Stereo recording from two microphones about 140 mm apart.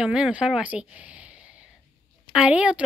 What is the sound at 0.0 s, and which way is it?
Speech, 5° right (ahead or behind).